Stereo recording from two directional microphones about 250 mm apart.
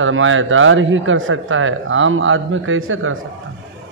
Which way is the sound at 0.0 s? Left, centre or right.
Right.